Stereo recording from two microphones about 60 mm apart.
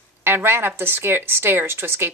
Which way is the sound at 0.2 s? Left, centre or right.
Right.